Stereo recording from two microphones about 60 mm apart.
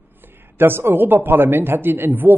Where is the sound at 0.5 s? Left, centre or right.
Right.